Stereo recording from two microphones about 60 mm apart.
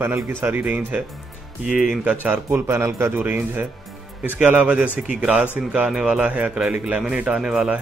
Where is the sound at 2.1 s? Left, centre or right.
Right.